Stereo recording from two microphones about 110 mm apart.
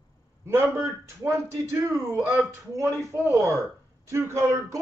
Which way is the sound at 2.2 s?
10° right (ahead or behind).